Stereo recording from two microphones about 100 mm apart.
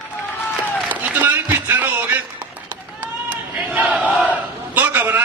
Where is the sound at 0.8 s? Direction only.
15° right (ahead or behind).